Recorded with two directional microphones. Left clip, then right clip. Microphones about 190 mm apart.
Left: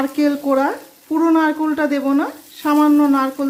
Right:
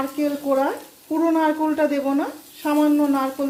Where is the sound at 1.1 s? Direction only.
15° left (ahead or behind).